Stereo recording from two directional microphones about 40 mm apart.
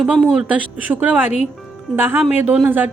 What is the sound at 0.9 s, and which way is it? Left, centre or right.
A woman's voice, right.